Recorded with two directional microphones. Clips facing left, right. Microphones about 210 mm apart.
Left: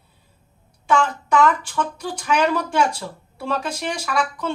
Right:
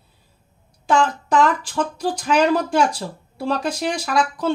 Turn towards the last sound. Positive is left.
turn(degrees=-35)  # may be behind; listen again after turning